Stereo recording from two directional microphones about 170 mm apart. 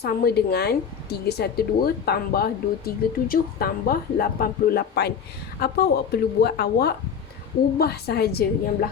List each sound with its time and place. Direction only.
0.0 s speech: 70° left (ahead or behind)